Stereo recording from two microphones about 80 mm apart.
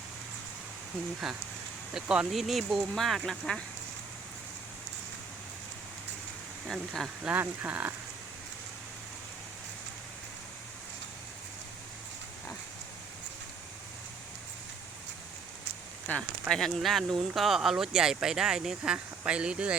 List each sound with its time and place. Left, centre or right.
1.2 s speech: centre
6.7 s speech: centre
7.2 s speech: centre
16.1 s speech: left
16.5 s speech: centre